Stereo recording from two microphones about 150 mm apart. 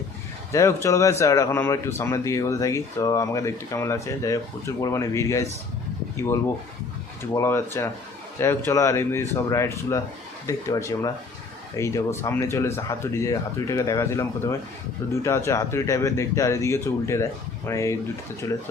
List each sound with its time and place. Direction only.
0.5 s speech: 20° left (ahead or behind)
7.2 s speech: 15° left (ahead or behind)